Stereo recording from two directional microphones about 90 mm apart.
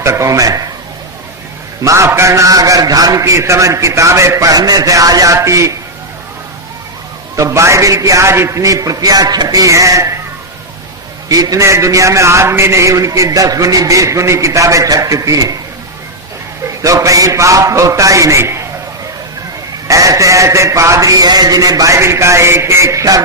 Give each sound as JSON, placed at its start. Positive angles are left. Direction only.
{"t": 0.0, "sound": "a man's voice", "side_deg": -35}
{"t": 1.8, "sound": "a man's voice", "side_deg": -35}
{"t": 7.3, "sound": "a man's voice", "side_deg": -35}
{"t": 11.3, "sound": "a man's voice", "side_deg": -40}
{"t": 16.8, "sound": "a man's voice", "side_deg": -40}
{"t": 19.9, "sound": "a man's voice", "side_deg": -35}